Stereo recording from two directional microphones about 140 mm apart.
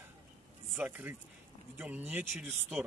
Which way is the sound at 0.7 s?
15° right (ahead or behind).